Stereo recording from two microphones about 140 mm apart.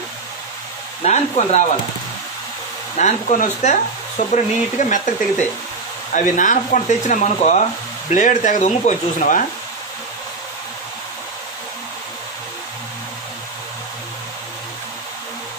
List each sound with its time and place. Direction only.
1.0 s speech: 50° left (ahead or behind)
3.0 s speech: 60° left (ahead or behind)
6.1 s speech: 65° left (ahead or behind)